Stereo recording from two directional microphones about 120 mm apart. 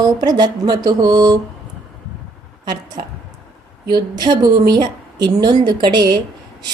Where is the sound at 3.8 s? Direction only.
35° right (ahead or behind).